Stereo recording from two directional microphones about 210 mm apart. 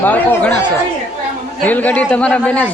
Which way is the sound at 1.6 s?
10° left (ahead or behind).